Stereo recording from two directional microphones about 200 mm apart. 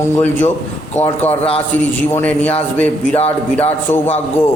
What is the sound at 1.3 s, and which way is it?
Speech, 30° left (ahead or behind).